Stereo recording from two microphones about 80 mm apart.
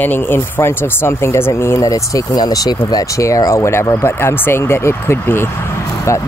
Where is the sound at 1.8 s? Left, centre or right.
Left.